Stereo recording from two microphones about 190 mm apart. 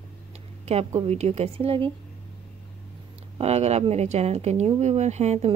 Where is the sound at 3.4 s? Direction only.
35° right (ahead or behind).